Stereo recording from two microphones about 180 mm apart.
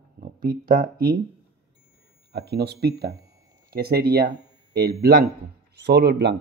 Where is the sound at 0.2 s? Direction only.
55° right (ahead or behind).